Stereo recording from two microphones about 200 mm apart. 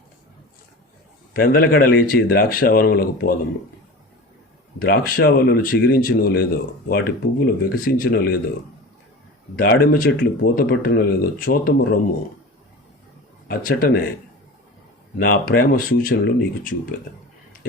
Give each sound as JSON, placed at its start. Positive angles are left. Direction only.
{"t": 1.3, "sound": "speech", "side_deg": 50}
{"t": 4.8, "sound": "speech", "side_deg": 45}
{"t": 9.6, "sound": "speech", "side_deg": 50}
{"t": 13.5, "sound": "speech", "side_deg": 45}
{"t": 15.2, "sound": "speech", "side_deg": 50}